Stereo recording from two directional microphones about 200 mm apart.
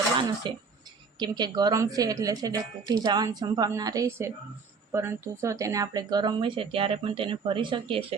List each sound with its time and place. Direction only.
0.2 s a woman's voice: 25° right (ahead or behind)